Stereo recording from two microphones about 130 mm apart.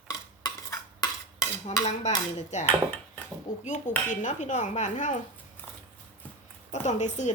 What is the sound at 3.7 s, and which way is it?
Dishes, 75° left (ahead or behind).